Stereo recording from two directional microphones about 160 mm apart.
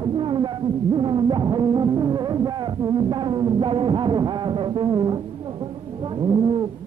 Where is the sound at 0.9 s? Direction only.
30° right (ahead or behind).